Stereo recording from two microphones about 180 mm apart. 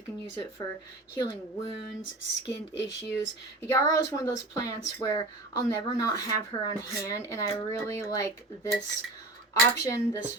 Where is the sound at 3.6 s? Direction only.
15° left (ahead or behind).